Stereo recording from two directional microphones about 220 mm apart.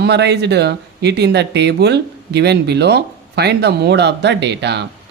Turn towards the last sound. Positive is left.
turn(degrees=-50)  # may be behind; listen again after turning